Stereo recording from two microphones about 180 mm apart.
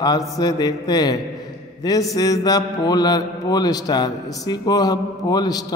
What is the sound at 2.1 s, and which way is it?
Speech, 20° left (ahead or behind).